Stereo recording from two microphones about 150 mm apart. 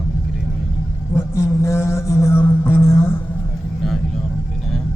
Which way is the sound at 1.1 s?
20° left (ahead or behind).